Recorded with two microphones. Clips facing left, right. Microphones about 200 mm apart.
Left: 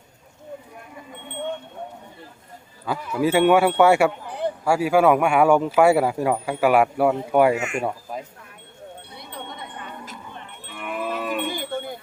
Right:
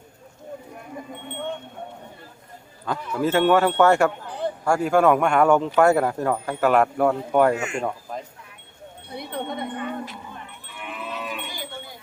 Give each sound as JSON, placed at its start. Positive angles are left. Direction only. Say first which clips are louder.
{"t": 2.8, "sound": "a man's voice", "louder": "left 2 dB", "side_deg": 5}
{"t": 9.1, "sound": "wind chime", "louder": "right 10 dB", "side_deg": -55}
{"t": 10.7, "sound": "cattle", "louder": "left 7 dB", "side_deg": 55}